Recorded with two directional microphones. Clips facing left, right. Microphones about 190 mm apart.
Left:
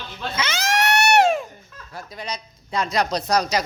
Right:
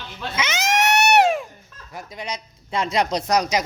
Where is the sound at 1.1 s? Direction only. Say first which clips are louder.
Even; 15° right (ahead or behind).